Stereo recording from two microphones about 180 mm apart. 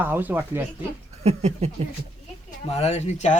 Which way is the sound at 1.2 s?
35° right (ahead or behind).